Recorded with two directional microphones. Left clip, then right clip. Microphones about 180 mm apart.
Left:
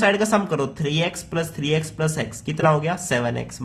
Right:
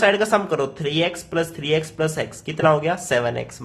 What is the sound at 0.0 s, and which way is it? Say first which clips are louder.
A woman's voice: right 2 dB; 10° left (ahead or behind).